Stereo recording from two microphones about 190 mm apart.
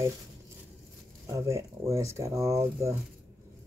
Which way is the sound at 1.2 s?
15° right (ahead or behind).